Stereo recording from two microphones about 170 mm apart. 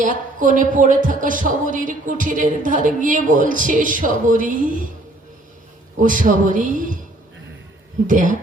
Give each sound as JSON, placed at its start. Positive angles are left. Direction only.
{"t": 0.0, "sound": "a woman's voice", "side_deg": -50}
{"t": 6.0, "sound": "a woman's voice", "side_deg": -50}
{"t": 8.0, "sound": "a woman's voice", "side_deg": -50}